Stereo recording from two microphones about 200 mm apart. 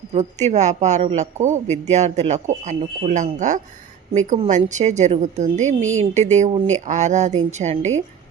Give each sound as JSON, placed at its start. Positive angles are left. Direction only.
{"t": 0.1, "sound": "a man's voice", "side_deg": -35}
{"t": 5.8, "sound": "speech", "side_deg": -80}
{"t": 6.1, "sound": "a man's voice", "side_deg": -35}